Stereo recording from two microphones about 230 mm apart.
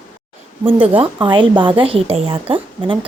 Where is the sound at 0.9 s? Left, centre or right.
Right.